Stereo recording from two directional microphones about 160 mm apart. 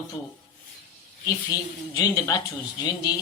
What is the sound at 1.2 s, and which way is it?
Speech, 20° left (ahead or behind).